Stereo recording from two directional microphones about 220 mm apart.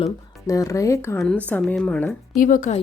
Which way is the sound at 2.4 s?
35° left (ahead or behind).